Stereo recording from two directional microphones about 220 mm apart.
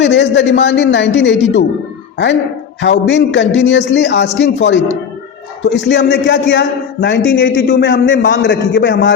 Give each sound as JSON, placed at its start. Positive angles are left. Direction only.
{"t": 0.0, "sound": "a man's voice", "side_deg": 55}